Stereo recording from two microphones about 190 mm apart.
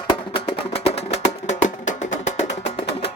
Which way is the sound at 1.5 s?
40° left (ahead or behind).